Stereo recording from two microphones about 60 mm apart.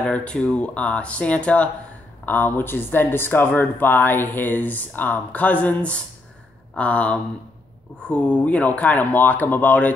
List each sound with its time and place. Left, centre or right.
0.0 s speech: centre